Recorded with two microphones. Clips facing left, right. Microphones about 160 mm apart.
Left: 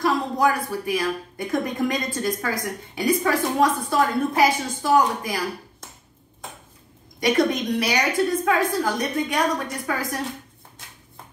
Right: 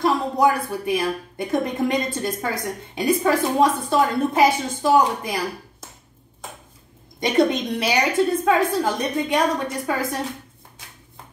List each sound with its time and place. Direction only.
0.0 s a woman's voice: 25° right (ahead or behind)
7.2 s a woman's voice: 25° right (ahead or behind)